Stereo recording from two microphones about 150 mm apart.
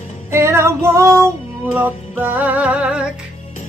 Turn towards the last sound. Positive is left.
turn(degrees=-5)  # may be behind; listen again after turning